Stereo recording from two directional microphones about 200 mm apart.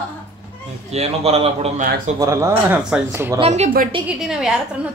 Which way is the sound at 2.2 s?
15° right (ahead or behind).